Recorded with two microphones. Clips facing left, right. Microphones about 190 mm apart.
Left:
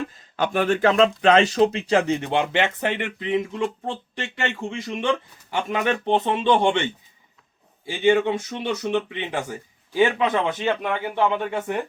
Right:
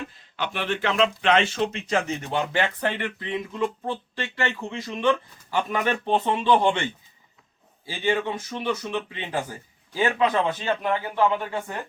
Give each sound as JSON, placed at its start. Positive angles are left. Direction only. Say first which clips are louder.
{"t": 0.1, "sound": "a man's voice", "louder": "left 7 dB", "side_deg": 45}
{"t": 8.2, "sound": "speech", "louder": "left 4 dB", "side_deg": 70}
{"t": 9.1, "sound": "a man's voice", "louder": "left 2 dB", "side_deg": 20}